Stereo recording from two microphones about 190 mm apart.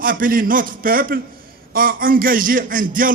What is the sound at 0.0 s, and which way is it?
A man's voice, 45° right (ahead or behind).